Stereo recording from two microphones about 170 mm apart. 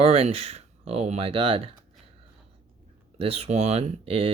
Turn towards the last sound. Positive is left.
turn(degrees=-35)  # may be behind; listen again after turning